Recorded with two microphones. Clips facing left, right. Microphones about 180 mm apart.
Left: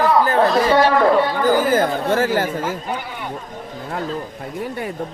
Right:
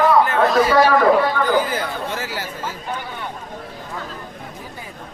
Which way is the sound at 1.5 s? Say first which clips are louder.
Left 4 dB; 45° left (ahead or behind).